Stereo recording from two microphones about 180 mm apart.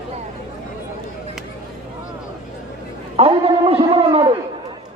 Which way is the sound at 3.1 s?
30° right (ahead or behind).